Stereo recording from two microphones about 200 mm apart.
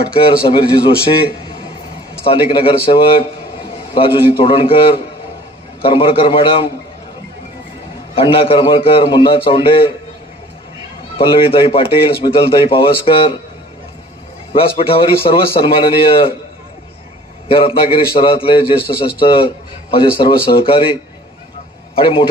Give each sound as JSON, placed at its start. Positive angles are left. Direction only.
{"t": 0.2, "sound": "speech", "side_deg": 25}
{"t": 2.2, "sound": "speech", "side_deg": 25}
{"t": 8.1, "sound": "speech", "side_deg": 25}
{"t": 11.1, "sound": "speech", "side_deg": 25}
{"t": 14.5, "sound": "speech", "side_deg": 25}
{"t": 17.5, "sound": "a man's voice", "side_deg": 25}